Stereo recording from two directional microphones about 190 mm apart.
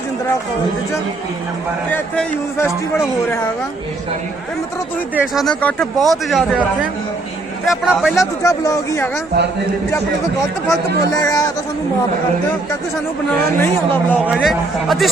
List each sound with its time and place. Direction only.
1.9 s speech: 10° left (ahead or behind)
5.1 s speech: centre (ahead or behind)
8.1 s speech: 15° left (ahead or behind)
10.7 s speech: 20° left (ahead or behind)
13.6 s speech: 10° left (ahead or behind)
14.3 s speech: centre (ahead or behind)